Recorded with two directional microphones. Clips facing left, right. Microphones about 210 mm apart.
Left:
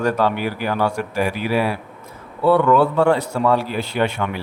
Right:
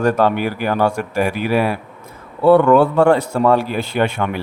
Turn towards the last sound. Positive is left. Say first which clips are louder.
# right 2 dB
turn(degrees=-50)  # may be behind; listen again after turning